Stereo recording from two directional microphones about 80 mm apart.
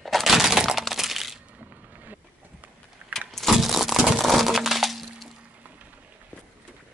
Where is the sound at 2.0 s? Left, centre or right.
Right.